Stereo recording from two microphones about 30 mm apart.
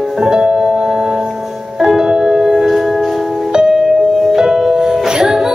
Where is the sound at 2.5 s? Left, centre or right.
Centre.